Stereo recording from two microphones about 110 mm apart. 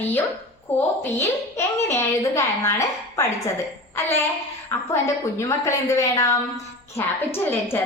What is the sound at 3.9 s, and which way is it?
A woman's voice, 20° left (ahead or behind).